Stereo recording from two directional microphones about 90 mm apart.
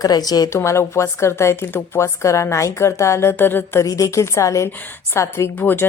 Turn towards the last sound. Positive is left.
turn(degrees=25)  # may be behind; listen again after turning